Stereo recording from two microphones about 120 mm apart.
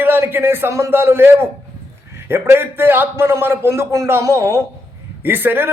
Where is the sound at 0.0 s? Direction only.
15° right (ahead or behind).